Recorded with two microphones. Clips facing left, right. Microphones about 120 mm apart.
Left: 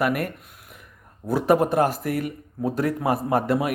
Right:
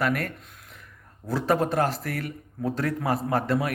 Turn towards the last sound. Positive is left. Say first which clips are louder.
# left 3 dB
turn(degrees=15)  # may be behind; listen again after turning